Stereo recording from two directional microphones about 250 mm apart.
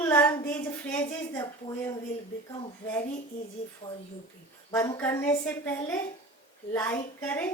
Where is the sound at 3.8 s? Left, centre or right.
Left.